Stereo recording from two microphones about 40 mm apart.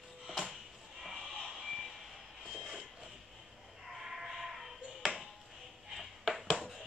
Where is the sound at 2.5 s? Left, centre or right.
Centre.